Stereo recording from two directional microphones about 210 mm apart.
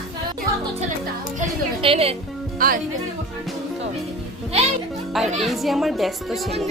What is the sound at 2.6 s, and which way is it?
Speech, 40° right (ahead or behind).